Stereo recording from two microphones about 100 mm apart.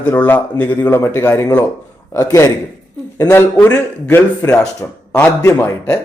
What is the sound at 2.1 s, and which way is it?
Speech, 35° left (ahead or behind).